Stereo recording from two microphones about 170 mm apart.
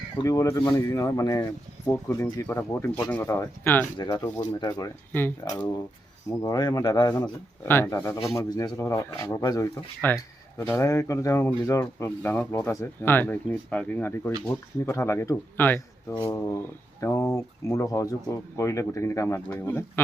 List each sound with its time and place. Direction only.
0.2 s speech: 20° left (ahead or behind)
3.9 s speech: 25° left (ahead or behind)